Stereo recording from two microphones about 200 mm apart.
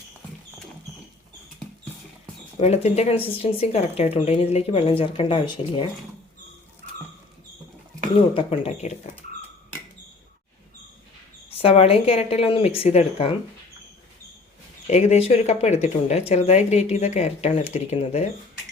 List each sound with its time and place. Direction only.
2.6 s speech: 30° left (ahead or behind)
8.3 s speech: 30° left (ahead or behind)
11.6 s speech: 30° left (ahead or behind)
14.8 s speech: 35° left (ahead or behind)